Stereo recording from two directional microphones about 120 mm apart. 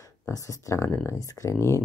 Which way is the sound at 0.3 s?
25° left (ahead or behind).